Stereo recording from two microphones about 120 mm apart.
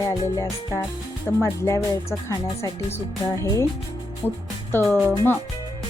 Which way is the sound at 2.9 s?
25° left (ahead or behind).